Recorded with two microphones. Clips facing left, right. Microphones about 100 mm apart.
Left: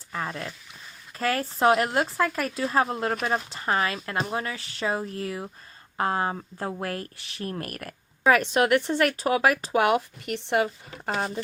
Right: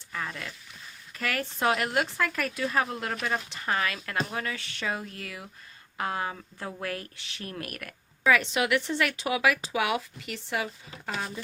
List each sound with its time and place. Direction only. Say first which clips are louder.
0.1 s speech: left 4 dB; 35° left (ahead or behind)
8.4 s speech: left 5 dB; 50° left (ahead or behind)